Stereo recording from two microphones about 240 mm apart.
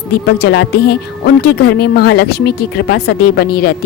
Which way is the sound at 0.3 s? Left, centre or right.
Left.